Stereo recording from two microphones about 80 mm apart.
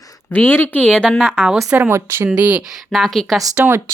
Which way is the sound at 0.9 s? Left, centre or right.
Centre.